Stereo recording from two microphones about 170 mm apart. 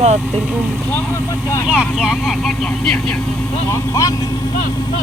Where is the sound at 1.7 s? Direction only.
5° right (ahead or behind).